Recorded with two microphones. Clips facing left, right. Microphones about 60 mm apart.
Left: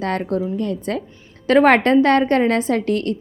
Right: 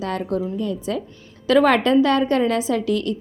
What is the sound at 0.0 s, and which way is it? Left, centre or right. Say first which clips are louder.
A woman's voice: left 2 dB; left.